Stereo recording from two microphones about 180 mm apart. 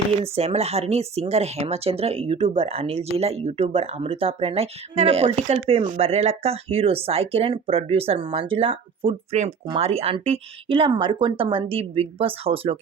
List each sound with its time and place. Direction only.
0.3 s speech: 35° right (ahead or behind)